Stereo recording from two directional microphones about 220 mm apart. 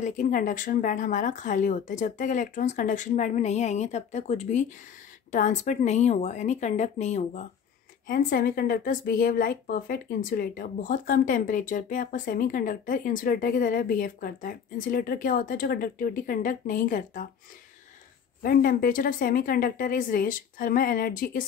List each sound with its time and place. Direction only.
0.0 s a woman's voice: 35° left (ahead or behind)
18.4 s a woman's voice: 40° left (ahead or behind)